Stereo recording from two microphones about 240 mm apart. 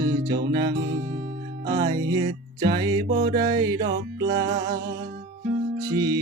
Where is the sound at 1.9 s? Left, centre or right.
Centre.